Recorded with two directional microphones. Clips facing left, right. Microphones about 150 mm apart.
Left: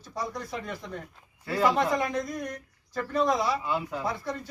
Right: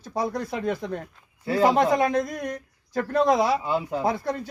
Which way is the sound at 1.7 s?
60° right (ahead or behind).